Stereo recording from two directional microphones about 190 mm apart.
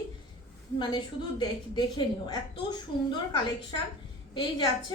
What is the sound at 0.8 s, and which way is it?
A woman's voice, 25° left (ahead or behind).